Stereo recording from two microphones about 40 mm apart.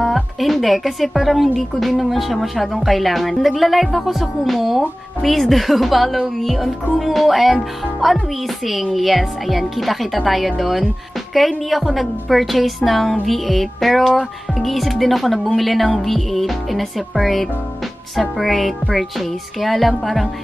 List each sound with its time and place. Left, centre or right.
0.0 s speech: centre